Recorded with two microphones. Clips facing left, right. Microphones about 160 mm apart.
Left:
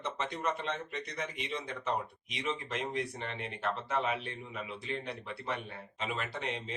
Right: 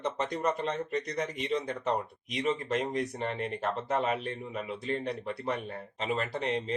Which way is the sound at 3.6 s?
40° right (ahead or behind).